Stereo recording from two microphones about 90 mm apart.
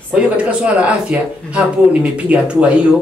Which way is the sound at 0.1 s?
15° right (ahead or behind).